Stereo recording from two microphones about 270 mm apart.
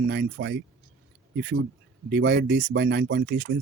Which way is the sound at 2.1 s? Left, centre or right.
Right.